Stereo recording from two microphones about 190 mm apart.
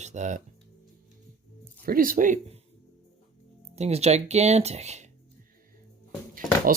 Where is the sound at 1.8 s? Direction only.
50° right (ahead or behind).